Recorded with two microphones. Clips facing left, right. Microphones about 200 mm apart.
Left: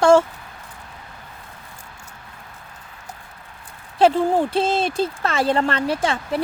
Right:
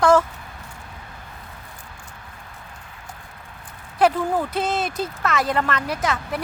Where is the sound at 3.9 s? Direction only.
25° left (ahead or behind).